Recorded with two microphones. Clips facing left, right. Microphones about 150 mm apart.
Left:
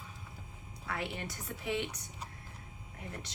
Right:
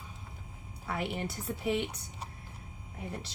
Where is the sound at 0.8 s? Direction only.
25° right (ahead or behind).